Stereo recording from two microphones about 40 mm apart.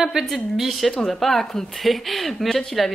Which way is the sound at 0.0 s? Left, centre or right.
Centre.